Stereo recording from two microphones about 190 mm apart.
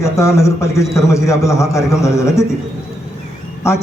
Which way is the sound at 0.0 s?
15° left (ahead or behind).